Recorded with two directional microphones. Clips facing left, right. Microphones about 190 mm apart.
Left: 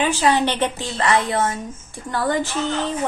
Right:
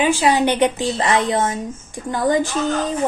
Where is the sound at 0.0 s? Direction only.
10° right (ahead or behind).